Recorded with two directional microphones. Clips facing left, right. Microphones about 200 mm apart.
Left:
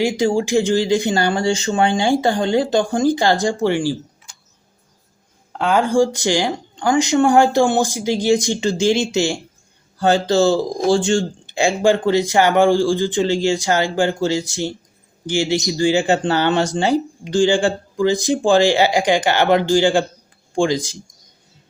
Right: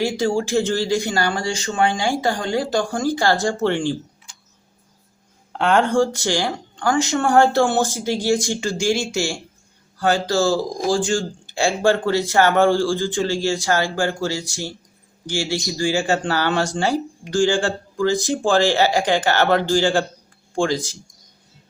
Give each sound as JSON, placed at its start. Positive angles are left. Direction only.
{"t": 0.0, "sound": "speech", "side_deg": 15}
{"t": 5.5, "sound": "speech", "side_deg": 5}